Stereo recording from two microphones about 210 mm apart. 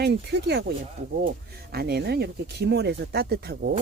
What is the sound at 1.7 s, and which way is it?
Speech, 50° right (ahead or behind).